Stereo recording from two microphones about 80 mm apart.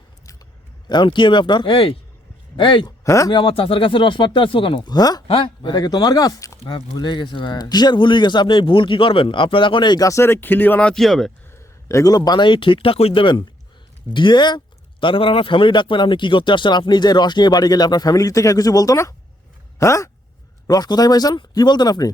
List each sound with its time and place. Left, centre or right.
0.9 s speech: left
3.0 s speech: left
3.3 s speech: left
5.3 s a man's voice: left
6.7 s speech: left
10.0 s speech: left; by 11.0 s centre
11.0 s speech: centre
11.6 s a sound: left
12.1 s speech: left
15.0 s a man's voice: left
20.7 s a man's voice: left